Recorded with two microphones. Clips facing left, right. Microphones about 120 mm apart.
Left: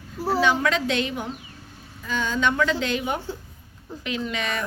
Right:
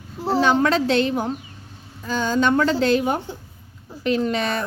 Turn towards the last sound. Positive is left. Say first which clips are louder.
# right 6 dB
turn(degrees=-35)  # may be behind; listen again after turning